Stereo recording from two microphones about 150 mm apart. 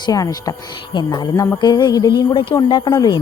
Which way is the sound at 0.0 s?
25° left (ahead or behind).